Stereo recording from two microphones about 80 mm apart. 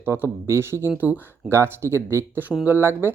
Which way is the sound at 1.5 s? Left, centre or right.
Right.